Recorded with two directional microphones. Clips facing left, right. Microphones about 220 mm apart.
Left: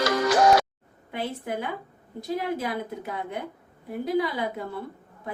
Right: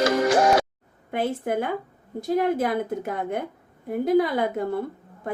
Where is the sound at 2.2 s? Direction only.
50° right (ahead or behind).